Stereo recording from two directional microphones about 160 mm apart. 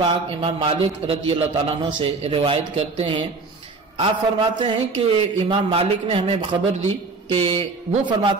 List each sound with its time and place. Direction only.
0.0 s a man's voice: 35° right (ahead or behind)